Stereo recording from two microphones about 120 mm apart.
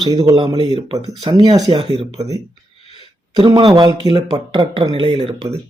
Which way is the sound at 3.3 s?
40° right (ahead or behind).